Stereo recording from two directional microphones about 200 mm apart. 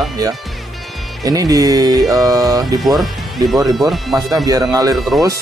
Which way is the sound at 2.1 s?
20° right (ahead or behind).